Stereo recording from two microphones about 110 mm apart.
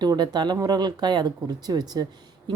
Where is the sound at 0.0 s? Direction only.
40° right (ahead or behind).